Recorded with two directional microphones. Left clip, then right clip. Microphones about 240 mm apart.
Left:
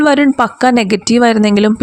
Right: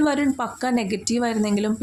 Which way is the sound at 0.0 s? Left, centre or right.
Left.